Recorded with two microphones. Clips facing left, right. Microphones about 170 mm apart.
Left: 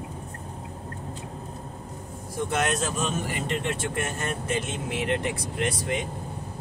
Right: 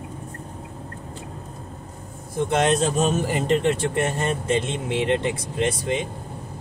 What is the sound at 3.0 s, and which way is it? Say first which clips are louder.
Speech: right 7 dB; 35° right (ahead or behind).